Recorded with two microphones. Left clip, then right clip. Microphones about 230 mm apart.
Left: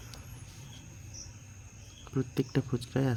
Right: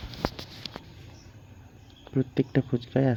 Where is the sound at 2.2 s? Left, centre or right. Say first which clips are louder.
Right 6 dB; centre.